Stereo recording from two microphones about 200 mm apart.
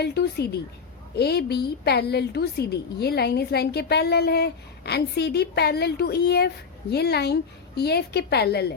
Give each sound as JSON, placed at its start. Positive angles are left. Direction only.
{"t": 0.0, "sound": "a woman's voice", "side_deg": 55}